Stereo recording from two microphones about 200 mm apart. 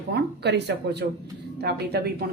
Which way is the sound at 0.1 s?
55° right (ahead or behind).